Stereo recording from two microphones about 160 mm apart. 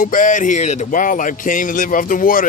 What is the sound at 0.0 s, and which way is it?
Speech, 55° left (ahead or behind).